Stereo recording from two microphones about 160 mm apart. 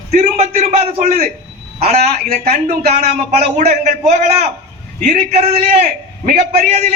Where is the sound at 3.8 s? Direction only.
45° right (ahead or behind).